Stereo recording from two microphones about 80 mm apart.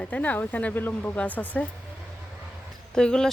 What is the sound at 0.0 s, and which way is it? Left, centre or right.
Speech, left.